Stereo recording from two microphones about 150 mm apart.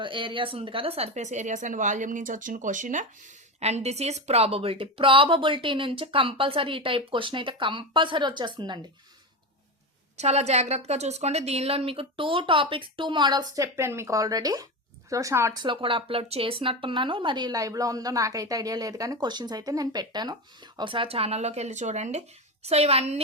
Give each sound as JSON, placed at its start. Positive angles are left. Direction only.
{"t": 0.0, "sound": "speech", "side_deg": -35}
{"t": 3.6, "sound": "a woman's voice", "side_deg": -45}
{"t": 10.2, "sound": "a woman's voice", "side_deg": -45}
{"t": 15.6, "sound": "a woman's voice", "side_deg": -35}